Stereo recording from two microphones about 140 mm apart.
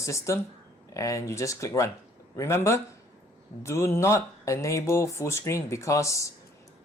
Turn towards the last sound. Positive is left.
turn(degrees=20)  # may be behind; listen again after turning